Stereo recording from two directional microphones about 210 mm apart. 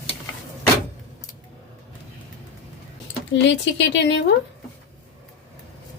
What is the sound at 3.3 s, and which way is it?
A woman's voice, 60° left (ahead or behind).